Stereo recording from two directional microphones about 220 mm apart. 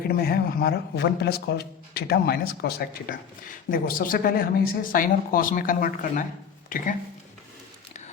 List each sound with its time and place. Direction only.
0.1 s speech: 45° left (ahead or behind)